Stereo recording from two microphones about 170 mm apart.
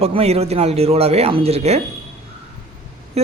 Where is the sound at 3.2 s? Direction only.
40° right (ahead or behind).